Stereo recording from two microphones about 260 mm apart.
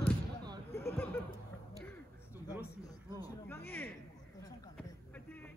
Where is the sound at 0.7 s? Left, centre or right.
Centre.